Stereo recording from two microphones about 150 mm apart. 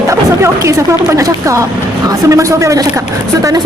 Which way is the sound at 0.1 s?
20° right (ahead or behind).